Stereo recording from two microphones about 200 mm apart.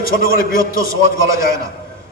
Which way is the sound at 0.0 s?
45° left (ahead or behind).